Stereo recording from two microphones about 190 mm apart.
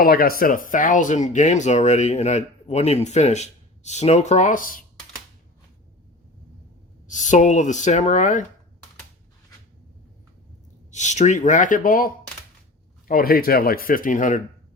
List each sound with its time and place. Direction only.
0.0 s speech: 50° left (ahead or behind)
7.1 s speech: 40° left (ahead or behind)
10.9 s speech: 40° left (ahead or behind)